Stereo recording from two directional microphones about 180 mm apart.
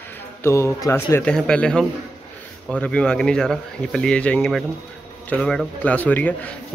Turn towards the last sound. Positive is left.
turn(degrees=10)  # may be behind; listen again after turning